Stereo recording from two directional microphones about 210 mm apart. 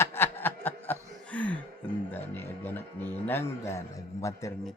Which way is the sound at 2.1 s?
10° left (ahead or behind).